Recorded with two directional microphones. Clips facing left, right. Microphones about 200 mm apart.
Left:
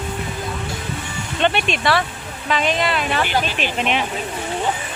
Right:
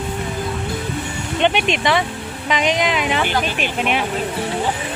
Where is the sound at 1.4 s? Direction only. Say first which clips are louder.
Right 2 dB; 15° right (ahead or behind).